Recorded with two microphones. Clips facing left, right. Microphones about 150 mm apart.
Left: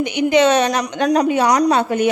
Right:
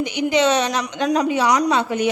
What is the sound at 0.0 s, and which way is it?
A woman's voice, 60° left (ahead or behind).